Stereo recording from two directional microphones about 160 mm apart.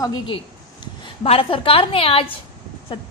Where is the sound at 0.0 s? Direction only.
30° left (ahead or behind).